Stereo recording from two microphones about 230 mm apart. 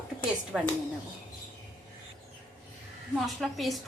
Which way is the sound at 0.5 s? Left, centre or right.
Centre.